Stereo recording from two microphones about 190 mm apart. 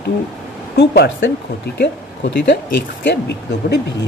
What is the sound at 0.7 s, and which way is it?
Speech, 70° left (ahead or behind).